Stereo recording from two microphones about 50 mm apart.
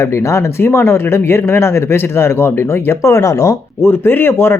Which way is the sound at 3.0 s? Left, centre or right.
Left.